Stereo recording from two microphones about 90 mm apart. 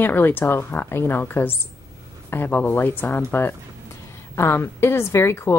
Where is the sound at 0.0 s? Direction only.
25° left (ahead or behind).